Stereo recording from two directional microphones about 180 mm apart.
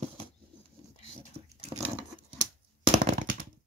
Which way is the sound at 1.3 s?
35° right (ahead or behind).